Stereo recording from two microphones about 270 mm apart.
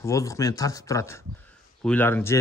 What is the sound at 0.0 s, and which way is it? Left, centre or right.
A man's voice, centre.